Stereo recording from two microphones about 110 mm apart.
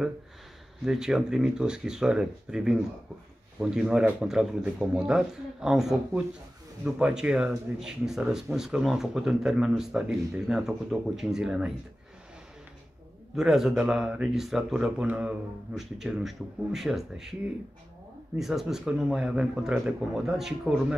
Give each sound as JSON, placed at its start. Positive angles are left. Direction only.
{"t": 0.8, "sound": "speech", "side_deg": -5}
{"t": 13.4, "sound": "speech", "side_deg": -5}
{"t": 18.4, "sound": "speech", "side_deg": -5}